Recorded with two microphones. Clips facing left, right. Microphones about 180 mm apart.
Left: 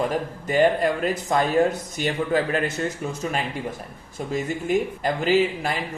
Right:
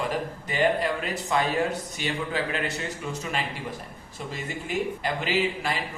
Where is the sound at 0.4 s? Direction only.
45° left (ahead or behind).